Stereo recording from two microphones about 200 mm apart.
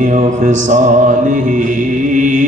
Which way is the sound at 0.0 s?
40° right (ahead or behind).